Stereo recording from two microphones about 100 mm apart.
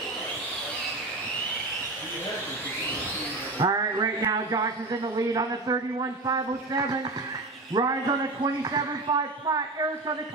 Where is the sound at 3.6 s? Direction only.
35° right (ahead or behind).